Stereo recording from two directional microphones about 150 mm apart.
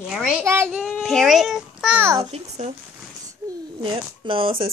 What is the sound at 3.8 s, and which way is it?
Speech, 35° right (ahead or behind).